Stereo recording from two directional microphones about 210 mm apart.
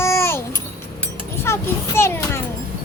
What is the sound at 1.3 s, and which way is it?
A child's voice, 10° left (ahead or behind).